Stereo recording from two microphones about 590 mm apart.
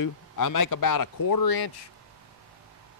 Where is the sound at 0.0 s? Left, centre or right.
Left.